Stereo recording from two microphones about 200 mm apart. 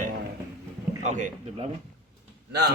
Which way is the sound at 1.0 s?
35° right (ahead or behind).